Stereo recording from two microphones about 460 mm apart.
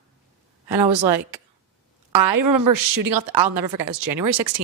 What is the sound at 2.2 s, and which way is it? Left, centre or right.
A woman's voice, right.